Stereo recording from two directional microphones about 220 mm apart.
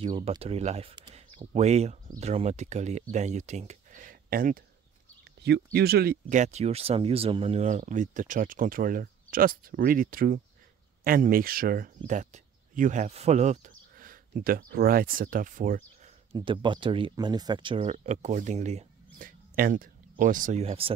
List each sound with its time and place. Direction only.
0.0 s speech: 25° right (ahead or behind)
16.3 s speech: 20° right (ahead or behind)